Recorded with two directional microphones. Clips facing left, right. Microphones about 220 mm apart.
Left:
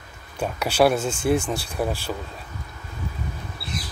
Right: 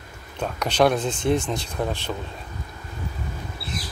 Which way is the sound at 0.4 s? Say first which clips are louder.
Left 1 dB; 10° left (ahead or behind).